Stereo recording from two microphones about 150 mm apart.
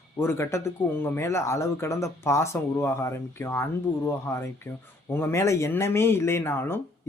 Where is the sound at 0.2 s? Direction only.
15° left (ahead or behind).